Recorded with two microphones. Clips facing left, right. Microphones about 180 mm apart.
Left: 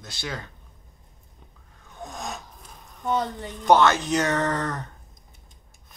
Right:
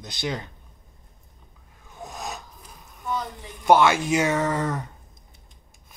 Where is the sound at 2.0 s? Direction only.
5° right (ahead or behind).